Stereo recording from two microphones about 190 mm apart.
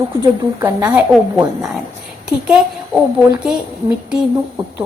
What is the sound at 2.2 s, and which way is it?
Speech, 5° right (ahead or behind).